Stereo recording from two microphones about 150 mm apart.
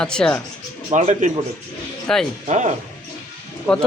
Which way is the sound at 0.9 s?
50° right (ahead or behind).